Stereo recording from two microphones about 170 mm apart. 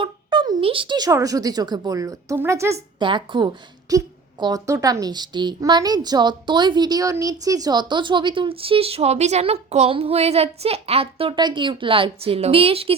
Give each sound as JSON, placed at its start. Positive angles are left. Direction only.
{"t": 0.0, "sound": "a woman's voice", "side_deg": -30}
{"t": 2.7, "sound": "a woman's voice", "side_deg": -30}